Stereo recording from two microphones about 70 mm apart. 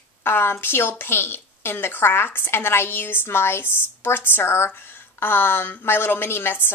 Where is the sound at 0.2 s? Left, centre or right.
Left.